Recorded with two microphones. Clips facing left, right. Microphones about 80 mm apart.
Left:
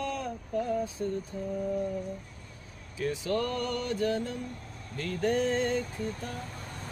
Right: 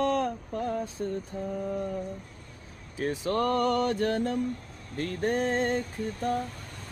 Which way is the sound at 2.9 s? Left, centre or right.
Right.